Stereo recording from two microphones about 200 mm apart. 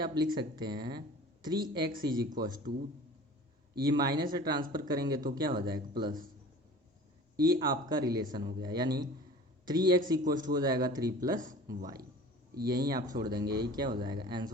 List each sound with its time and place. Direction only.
0.0 s speech: 20° right (ahead or behind)
3.8 s speech: 20° right (ahead or behind)
7.6 s speech: 20° right (ahead or behind)
11.3 s speech: 40° right (ahead or behind)
12.6 s speech: 20° right (ahead or behind)